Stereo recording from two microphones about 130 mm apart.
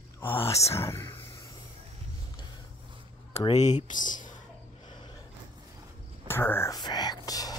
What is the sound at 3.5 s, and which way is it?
Speech, 65° left (ahead or behind).